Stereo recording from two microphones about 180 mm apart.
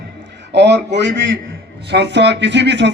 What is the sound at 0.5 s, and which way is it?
A man's voice, 70° right (ahead or behind).